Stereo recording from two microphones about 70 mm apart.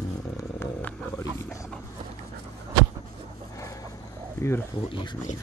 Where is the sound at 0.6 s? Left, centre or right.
Left.